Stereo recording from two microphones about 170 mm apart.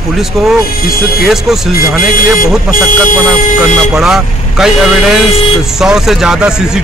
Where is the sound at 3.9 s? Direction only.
Centre (ahead or behind).